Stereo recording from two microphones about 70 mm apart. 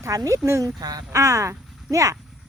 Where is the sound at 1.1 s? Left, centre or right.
Right.